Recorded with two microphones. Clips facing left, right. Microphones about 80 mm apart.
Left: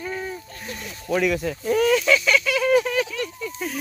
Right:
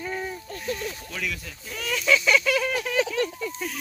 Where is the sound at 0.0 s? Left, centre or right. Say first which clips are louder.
Left 1 dB; centre.